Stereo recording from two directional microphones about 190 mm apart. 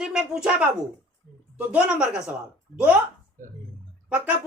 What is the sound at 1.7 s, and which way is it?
Speech, 5° right (ahead or behind).